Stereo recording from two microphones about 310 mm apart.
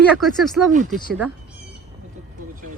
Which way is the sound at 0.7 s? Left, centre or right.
Right.